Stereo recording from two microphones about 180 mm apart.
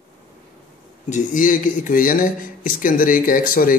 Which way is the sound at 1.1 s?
45° left (ahead or behind).